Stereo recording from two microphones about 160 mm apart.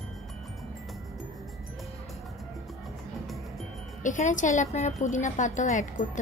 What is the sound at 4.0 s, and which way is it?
A woman's voice, 50° left (ahead or behind).